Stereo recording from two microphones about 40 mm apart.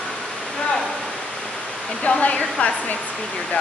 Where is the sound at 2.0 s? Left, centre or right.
Left.